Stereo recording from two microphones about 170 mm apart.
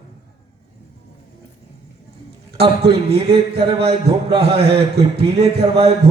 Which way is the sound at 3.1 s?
35° right (ahead or behind).